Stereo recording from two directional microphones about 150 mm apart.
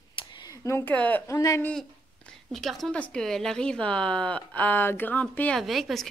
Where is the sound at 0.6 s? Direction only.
15° left (ahead or behind).